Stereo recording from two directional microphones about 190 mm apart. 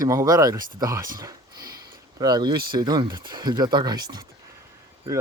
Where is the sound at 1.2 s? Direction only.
20° right (ahead or behind).